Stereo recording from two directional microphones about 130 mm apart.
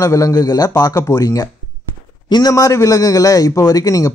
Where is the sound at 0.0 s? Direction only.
25° left (ahead or behind).